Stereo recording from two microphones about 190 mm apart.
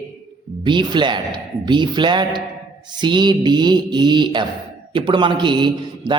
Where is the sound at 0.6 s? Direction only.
25° right (ahead or behind).